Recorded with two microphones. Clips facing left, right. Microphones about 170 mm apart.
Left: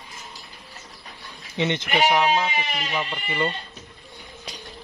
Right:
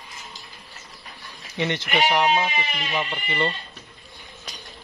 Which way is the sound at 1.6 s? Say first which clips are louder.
Left 1 dB; 20° left (ahead or behind).